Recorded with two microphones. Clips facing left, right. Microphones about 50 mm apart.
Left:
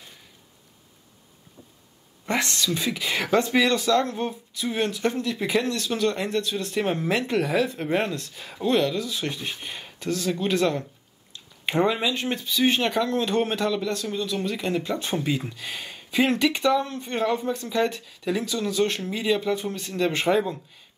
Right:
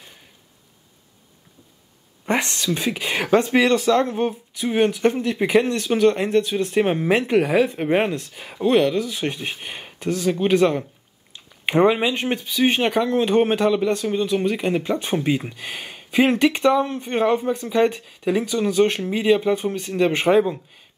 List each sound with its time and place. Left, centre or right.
2.2 s speech: right